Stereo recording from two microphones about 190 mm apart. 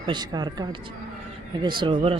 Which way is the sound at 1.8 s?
25° right (ahead or behind).